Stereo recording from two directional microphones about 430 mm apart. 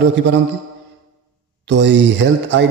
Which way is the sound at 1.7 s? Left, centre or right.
Right.